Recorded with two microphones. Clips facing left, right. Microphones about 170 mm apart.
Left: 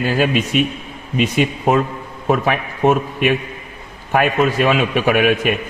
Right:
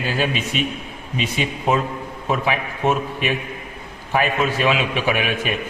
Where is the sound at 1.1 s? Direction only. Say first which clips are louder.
Left 7 dB; 50° left (ahead or behind).